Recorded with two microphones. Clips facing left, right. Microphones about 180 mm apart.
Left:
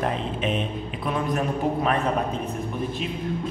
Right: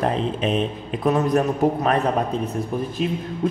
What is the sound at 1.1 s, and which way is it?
Speech, 40° right (ahead or behind).